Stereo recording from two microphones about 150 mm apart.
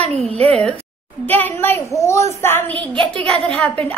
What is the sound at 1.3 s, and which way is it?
A child's voice, 15° left (ahead or behind).